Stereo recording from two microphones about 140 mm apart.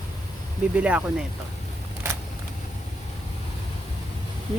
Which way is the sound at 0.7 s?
10° right (ahead or behind).